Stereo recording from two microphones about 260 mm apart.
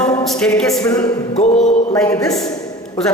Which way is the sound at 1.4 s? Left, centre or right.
Left.